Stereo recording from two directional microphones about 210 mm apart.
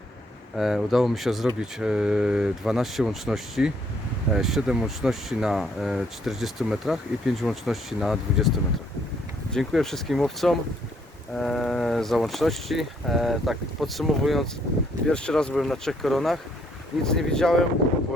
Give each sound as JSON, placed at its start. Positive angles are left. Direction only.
{"t": 0.5, "sound": "speech", "side_deg": 0}